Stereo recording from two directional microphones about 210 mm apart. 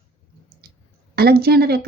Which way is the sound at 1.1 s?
50° right (ahead or behind).